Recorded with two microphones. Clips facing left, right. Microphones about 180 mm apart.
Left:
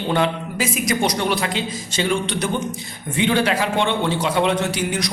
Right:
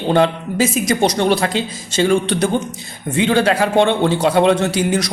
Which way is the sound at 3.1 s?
40° right (ahead or behind).